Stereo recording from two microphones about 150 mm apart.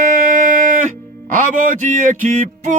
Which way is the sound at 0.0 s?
60° right (ahead or behind).